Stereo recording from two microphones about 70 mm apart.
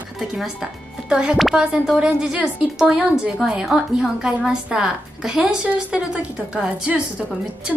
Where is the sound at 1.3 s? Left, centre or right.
Centre.